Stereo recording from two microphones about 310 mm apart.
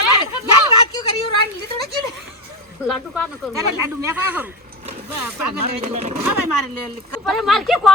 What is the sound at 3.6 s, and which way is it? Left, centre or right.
Speech, right.